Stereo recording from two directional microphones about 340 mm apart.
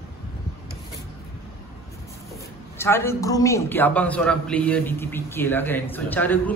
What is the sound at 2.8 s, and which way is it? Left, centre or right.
A man's voice, centre.